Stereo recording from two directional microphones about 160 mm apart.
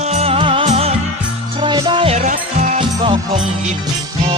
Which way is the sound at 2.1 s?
50° right (ahead or behind).